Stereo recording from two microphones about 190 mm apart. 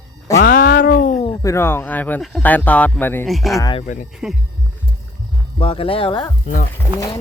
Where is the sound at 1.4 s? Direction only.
15° left (ahead or behind).